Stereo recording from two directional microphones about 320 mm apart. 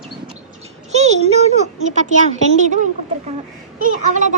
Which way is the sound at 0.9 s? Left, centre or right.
Right.